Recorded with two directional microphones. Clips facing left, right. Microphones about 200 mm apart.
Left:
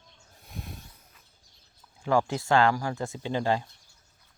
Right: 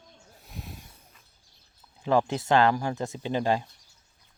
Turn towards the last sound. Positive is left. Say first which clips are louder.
# right 1 dB
turn(degrees=-15)  # may be behind; listen again after turning